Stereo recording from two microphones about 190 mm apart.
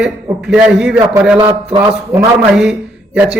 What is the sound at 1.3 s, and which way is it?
Speech, 25° right (ahead or behind).